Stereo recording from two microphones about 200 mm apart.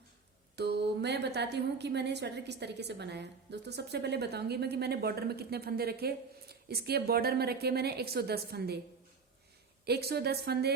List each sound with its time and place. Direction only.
0.5 s a woman's voice: 55° right (ahead or behind)
9.8 s a woman's voice: 55° right (ahead or behind)